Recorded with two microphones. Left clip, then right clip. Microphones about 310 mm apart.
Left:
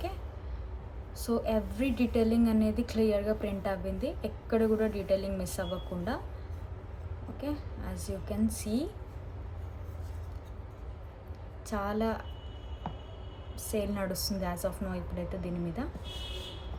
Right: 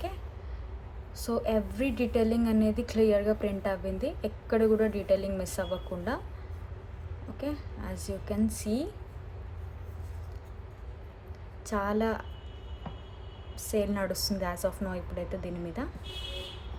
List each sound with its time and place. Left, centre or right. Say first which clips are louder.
1.2 s a woman's voice: right 1 dB; centre
7.3 s a woman's voice: right 2 dB; right
11.6 s a woman's voice: right 3 dB; right
13.6 s a woman's voice: right 3 dB; centre